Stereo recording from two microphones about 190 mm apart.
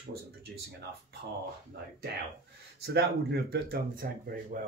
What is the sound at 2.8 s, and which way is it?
Speech, 60° right (ahead or behind).